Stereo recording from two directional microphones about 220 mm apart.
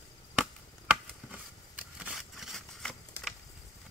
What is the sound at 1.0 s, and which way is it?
Scissors, 5° right (ahead or behind).